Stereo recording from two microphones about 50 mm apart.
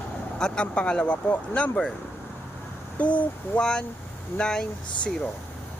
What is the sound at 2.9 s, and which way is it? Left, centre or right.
Speech, left.